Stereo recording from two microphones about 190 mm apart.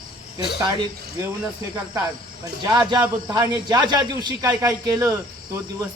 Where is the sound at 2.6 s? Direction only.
20° right (ahead or behind).